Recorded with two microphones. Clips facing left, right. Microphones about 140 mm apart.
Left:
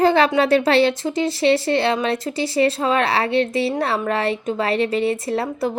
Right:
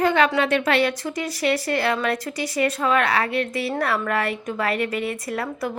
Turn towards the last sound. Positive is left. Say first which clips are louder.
# left 5 dB
turn(degrees=30)  # may be behind; listen again after turning